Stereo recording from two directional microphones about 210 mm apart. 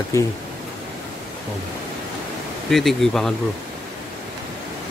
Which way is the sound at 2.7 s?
Centre (ahead or behind).